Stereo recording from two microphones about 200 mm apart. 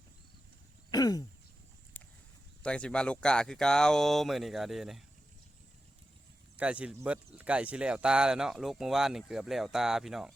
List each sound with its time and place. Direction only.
0.9 s throat clearing: 20° left (ahead or behind)
2.0 s a sound: 10° left (ahead or behind)
2.6 s speech: 5° left (ahead or behind)
6.6 s speech: 5° right (ahead or behind)